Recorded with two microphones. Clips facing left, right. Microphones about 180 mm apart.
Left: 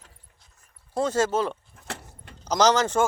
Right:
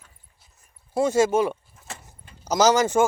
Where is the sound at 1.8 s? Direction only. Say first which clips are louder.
Left 4 dB; 65° left (ahead or behind).